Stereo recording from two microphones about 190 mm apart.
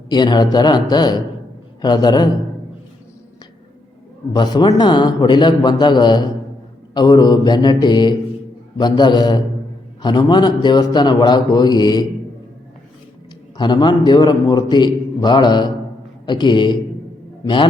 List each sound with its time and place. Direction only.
0.1 s a man's voice: 25° left (ahead or behind)
4.3 s a man's voice: 20° left (ahead or behind)
13.6 s a man's voice: 25° left (ahead or behind)